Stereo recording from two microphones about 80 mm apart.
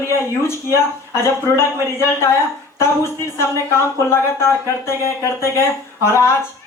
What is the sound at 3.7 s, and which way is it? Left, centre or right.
Speech, left.